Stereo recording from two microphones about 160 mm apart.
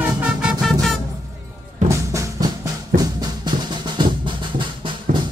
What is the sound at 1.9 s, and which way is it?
Music, 20° right (ahead or behind).